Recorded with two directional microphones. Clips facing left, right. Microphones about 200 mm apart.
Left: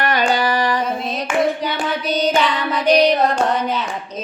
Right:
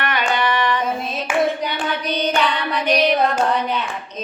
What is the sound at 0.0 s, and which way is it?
Singing, 35° left (ahead or behind).